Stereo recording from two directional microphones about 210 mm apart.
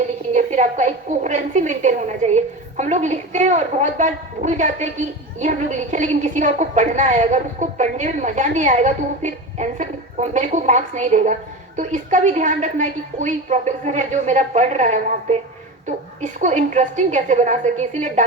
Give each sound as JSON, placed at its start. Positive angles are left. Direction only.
{"t": 0.3, "sound": "a woman's voice", "side_deg": -35}